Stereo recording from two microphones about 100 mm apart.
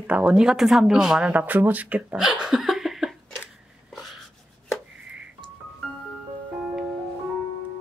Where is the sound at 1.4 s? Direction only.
15° right (ahead or behind).